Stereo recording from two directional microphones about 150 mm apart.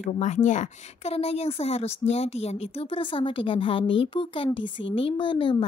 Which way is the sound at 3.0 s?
35° left (ahead or behind).